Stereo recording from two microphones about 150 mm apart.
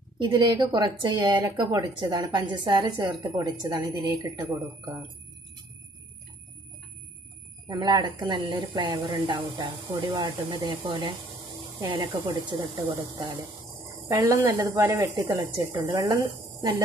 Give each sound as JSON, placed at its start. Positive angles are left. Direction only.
{"t": 0.2, "sound": "speech", "side_deg": -30}
{"t": 7.6, "sound": "speech", "side_deg": -30}
{"t": 14.1, "sound": "speech", "side_deg": -20}